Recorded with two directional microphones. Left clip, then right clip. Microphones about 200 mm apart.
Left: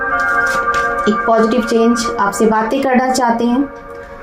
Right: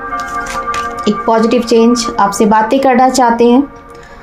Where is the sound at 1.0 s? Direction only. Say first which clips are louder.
Right 3 dB; 50° right (ahead or behind).